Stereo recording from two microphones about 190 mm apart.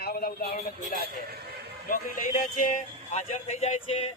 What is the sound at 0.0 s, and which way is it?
Speech, 50° left (ahead or behind).